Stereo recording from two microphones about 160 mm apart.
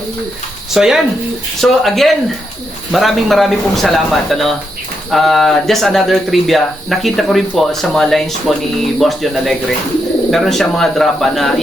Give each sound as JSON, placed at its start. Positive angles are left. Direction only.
{"t": 0.7, "sound": "speech", "side_deg": -5}